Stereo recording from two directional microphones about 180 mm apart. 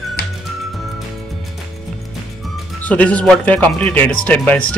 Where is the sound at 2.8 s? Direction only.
5° left (ahead or behind).